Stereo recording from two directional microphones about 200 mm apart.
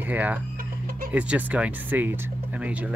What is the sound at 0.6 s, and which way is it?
Music, 45° right (ahead or behind).